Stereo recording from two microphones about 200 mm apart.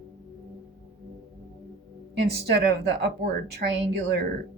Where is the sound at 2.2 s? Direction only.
55° right (ahead or behind).